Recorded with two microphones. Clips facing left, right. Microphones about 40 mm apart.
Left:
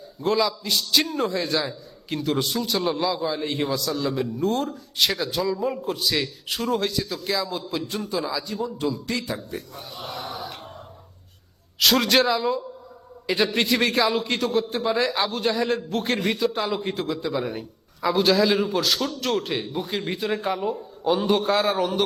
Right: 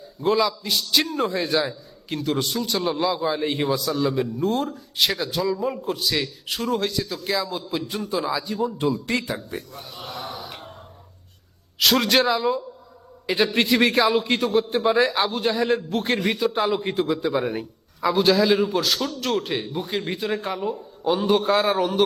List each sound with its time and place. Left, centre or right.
0.2 s a man's voice: centre
3.0 s a man's voice: centre
8.9 s a man's voice: right
9.6 s a man's voice: centre
11.8 s a man's voice: centre
18.0 s a man's voice: centre